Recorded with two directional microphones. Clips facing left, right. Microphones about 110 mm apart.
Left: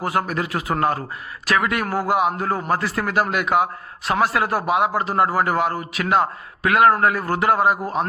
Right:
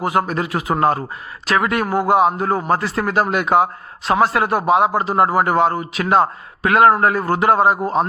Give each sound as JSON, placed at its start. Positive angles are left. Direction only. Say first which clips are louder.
{"t": 0.0, "sound": "a man's voice", "louder": "right 4 dB", "side_deg": -20}